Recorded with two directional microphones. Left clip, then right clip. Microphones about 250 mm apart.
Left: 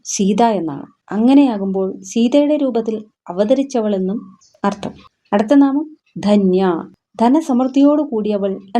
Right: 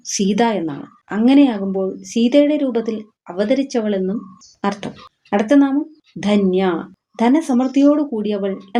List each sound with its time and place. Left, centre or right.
0.0 s a woman's voice: left